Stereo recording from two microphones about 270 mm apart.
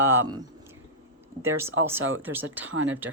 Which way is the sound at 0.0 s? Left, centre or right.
Centre.